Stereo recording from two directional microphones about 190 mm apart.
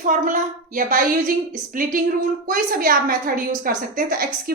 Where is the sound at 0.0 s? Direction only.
45° right (ahead or behind).